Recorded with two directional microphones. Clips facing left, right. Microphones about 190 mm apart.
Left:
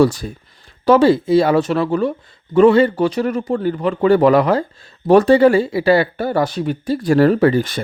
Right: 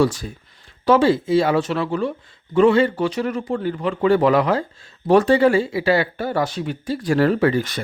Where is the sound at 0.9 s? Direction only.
40° left (ahead or behind).